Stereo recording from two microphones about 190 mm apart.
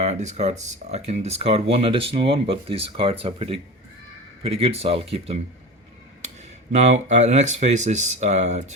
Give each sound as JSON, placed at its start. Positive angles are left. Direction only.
{"t": 0.0, "sound": "speech", "side_deg": -35}
{"t": 6.7, "sound": "speech", "side_deg": -35}